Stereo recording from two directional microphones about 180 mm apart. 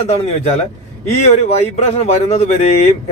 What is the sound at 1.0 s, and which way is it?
Speech, 40° left (ahead or behind).